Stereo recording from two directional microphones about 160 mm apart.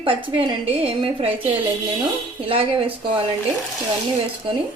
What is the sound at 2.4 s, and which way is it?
Speech, 35° right (ahead or behind).